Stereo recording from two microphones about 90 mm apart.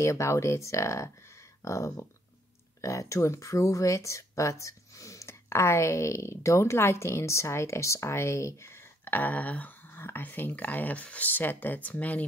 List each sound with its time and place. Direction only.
0.0 s speech: 35° left (ahead or behind); by 12.3 s 15° left (ahead or behind)